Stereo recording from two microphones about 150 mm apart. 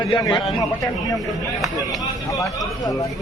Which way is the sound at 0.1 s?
30° left (ahead or behind).